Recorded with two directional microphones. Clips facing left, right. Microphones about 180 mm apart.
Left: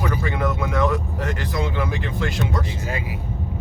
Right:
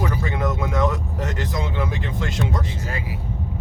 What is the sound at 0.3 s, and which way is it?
Speech, 20° right (ahead or behind).